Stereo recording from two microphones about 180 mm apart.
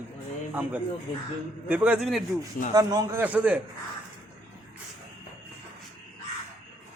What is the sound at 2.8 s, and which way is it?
Speech, 15° right (ahead or behind).